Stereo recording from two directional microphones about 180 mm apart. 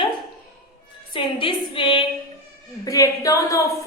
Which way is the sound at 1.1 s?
30° left (ahead or behind).